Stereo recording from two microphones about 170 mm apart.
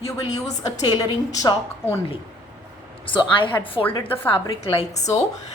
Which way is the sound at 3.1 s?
30° left (ahead or behind).